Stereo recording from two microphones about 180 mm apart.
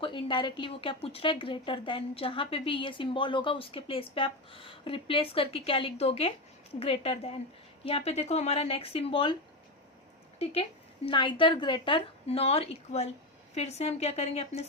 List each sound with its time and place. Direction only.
0.0 s a woman's voice: 30° left (ahead or behind)
10.3 s a woman's voice: 30° left (ahead or behind)